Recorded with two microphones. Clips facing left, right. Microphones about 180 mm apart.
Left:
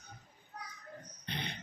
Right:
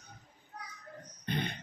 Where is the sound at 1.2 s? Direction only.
50° right (ahead or behind).